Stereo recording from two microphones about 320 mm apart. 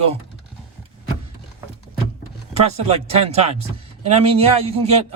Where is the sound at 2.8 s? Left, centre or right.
Centre.